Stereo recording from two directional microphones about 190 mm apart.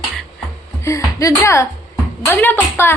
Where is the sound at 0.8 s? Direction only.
15° left (ahead or behind).